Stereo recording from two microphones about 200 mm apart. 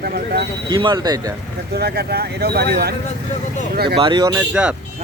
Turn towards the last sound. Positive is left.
turn(degrees=-5)  # may be behind; listen again after turning